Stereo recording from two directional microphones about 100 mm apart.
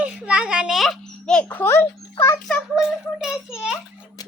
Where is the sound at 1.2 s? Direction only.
10° left (ahead or behind).